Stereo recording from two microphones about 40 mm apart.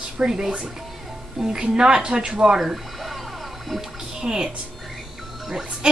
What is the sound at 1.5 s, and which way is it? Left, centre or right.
Speech, right.